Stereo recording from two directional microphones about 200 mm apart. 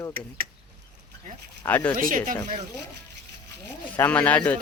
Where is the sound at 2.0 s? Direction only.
40° right (ahead or behind).